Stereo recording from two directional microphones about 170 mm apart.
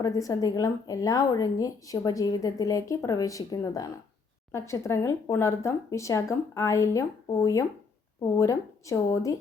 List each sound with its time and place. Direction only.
0.0 s a woman's voice: 20° left (ahead or behind)